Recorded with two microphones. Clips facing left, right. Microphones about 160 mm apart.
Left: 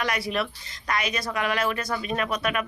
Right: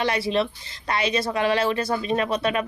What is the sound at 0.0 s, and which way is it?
A woman's voice, 30° right (ahead or behind).